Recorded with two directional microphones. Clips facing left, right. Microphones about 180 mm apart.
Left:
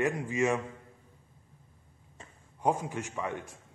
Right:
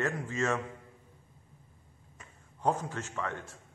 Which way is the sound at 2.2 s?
30° left (ahead or behind).